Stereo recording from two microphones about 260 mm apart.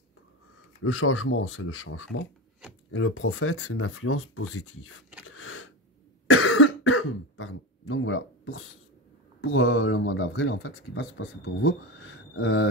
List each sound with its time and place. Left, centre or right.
0.8 s speech: left
5.2 s a sound: left
6.2 s cough: left
9.4 s speech: left